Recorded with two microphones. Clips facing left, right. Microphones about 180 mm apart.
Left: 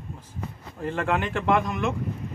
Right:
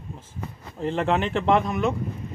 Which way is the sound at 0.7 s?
20° right (ahead or behind).